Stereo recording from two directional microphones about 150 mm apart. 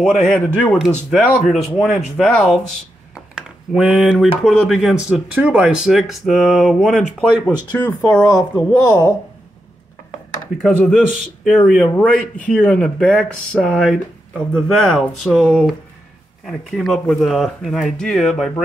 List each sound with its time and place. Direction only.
0.2 s speech: centre (ahead or behind)
3.2 s a sound: 5° right (ahead or behind)
4.4 s speech: 5° left (ahead or behind)
7.7 s speech: 15° left (ahead or behind)
10.6 s speech: centre (ahead or behind)